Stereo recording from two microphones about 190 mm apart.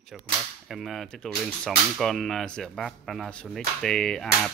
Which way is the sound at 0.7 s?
Centre (ahead or behind).